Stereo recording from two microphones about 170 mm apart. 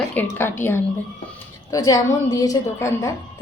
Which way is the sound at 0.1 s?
10° left (ahead or behind).